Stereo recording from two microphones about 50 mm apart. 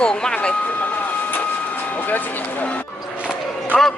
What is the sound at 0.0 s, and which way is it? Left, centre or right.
Vehicle, centre.